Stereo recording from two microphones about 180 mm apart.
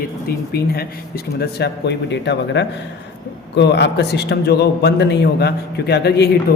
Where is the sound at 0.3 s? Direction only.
60° left (ahead or behind).